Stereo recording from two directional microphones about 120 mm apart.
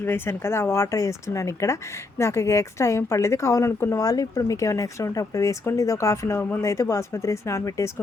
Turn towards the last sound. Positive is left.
turn(degrees=25)  # may be behind; listen again after turning